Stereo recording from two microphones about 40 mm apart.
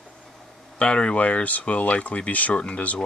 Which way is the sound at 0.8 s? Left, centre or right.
Left.